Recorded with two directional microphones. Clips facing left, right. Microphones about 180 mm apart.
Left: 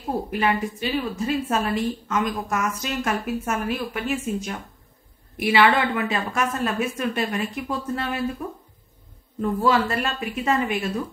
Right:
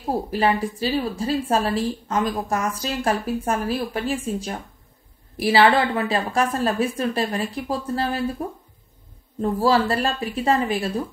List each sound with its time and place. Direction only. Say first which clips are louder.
0.1 s a woman's voice: right 2 dB; 35° right (ahead or behind)